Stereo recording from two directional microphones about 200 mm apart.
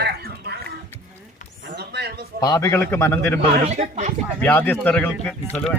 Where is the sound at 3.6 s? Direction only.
35° right (ahead or behind).